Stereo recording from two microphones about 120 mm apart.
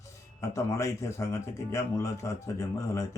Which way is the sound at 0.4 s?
25° left (ahead or behind).